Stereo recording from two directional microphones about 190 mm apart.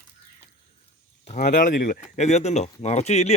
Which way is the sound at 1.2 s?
40° left (ahead or behind).